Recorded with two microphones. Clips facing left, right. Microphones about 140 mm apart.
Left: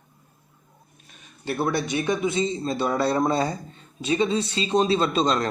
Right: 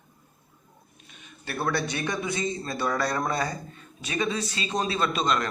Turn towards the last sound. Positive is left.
turn(degrees=30)  # may be behind; listen again after turning